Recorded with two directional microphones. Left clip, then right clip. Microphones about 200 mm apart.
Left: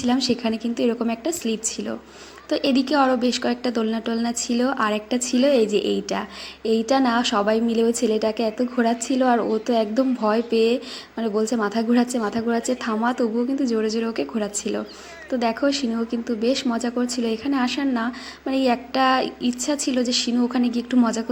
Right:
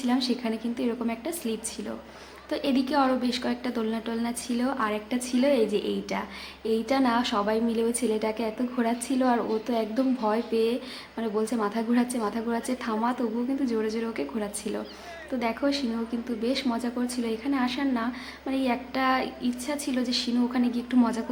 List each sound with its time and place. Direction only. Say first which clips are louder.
0.0 s a woman's voice: left 6 dB; 25° left (ahead or behind)